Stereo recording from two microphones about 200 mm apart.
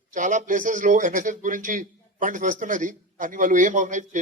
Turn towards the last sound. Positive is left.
turn(degrees=-40)  # may be behind; listen again after turning